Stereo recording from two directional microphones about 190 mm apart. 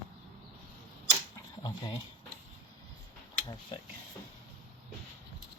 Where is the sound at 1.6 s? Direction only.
25° left (ahead or behind).